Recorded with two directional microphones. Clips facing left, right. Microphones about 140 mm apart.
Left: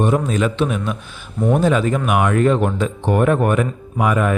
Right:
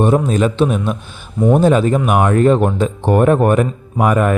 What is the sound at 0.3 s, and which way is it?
Speech, 35° right (ahead or behind).